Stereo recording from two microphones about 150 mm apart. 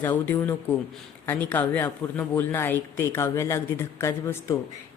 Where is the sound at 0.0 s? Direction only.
15° left (ahead or behind).